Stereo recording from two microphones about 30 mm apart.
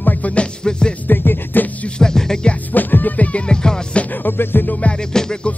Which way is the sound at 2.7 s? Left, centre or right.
Left.